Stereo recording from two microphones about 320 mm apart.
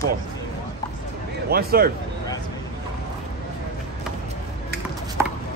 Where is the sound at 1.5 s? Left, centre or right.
Right.